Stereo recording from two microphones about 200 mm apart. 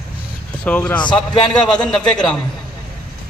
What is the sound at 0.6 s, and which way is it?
Speech, 5° left (ahead or behind).